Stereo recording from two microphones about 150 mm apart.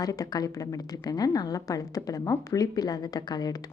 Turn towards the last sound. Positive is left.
turn(degrees=25)  # may be behind; listen again after turning